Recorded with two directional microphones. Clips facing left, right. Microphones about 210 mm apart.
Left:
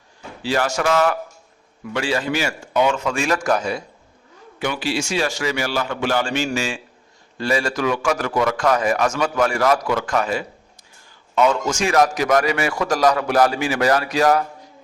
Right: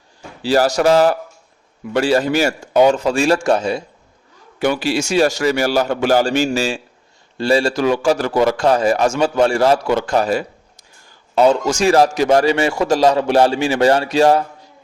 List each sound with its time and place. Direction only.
0.4 s a man's voice: 35° right (ahead or behind)
4.6 s a man's voice: 45° right (ahead or behind); by 14.4 s 30° right (ahead or behind)